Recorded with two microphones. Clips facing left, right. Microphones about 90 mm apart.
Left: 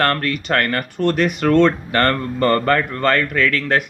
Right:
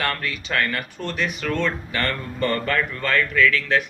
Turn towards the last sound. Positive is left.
turn(degrees=55)  # may be behind; listen again after turning